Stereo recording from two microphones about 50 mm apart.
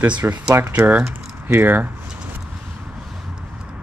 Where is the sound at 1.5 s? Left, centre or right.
Right.